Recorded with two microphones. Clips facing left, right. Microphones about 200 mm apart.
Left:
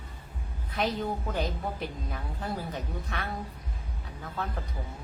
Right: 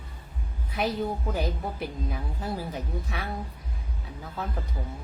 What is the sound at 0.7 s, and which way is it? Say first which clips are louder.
Speech: right 2 dB; 10° right (ahead or behind).